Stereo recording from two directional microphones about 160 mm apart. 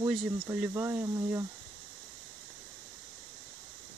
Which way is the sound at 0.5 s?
10° right (ahead or behind).